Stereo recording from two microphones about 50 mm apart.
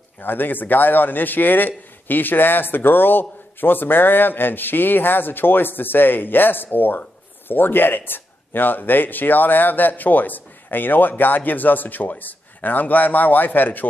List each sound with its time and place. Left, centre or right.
0.2 s a man's voice: left